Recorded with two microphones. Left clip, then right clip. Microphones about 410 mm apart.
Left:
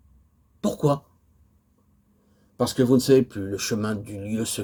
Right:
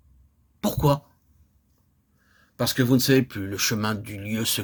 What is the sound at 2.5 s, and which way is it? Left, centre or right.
Speech, right.